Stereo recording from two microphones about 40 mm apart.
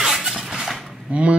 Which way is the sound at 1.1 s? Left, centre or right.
Right.